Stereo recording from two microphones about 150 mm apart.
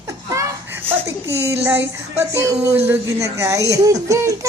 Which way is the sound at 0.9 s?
20° right (ahead or behind).